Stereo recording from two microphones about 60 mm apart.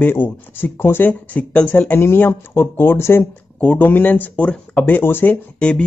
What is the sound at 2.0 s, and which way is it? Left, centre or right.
Speech, left.